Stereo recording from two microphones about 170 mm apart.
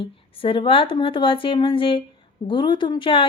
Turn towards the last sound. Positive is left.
turn(degrees=30)  # may be behind; listen again after turning